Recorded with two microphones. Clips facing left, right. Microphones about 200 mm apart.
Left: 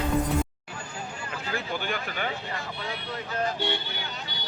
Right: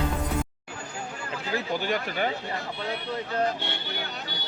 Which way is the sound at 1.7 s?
40° right (ahead or behind).